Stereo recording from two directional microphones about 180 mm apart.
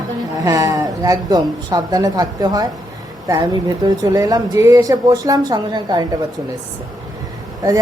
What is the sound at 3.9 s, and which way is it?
Speech, 20° right (ahead or behind).